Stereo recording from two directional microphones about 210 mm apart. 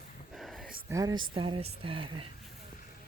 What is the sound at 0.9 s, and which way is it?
Speech, 15° right (ahead or behind).